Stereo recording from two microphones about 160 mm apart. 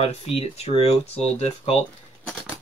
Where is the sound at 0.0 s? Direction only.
40° left (ahead or behind).